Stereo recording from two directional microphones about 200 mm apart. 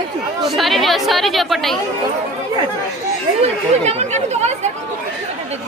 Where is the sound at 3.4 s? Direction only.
35° right (ahead or behind).